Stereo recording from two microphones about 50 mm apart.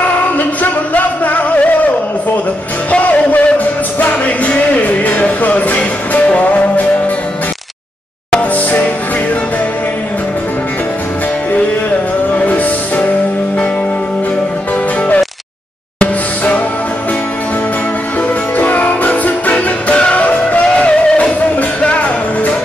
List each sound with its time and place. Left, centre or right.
0.4 s music: left
8.4 s music: left
12.3 s music: left
16.0 s music: left
18.6 s music: left